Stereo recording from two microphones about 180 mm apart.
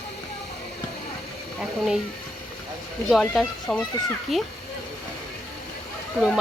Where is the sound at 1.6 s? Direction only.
5° right (ahead or behind).